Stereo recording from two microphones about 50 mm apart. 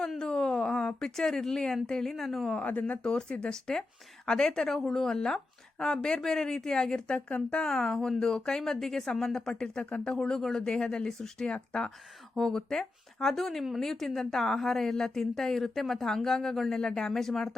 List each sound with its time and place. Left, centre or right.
0.2 s speech: centre
2.5 s speech: left
3.0 s a woman's voice: centre
7.3 s speech: left
7.6 s a woman's voice: centre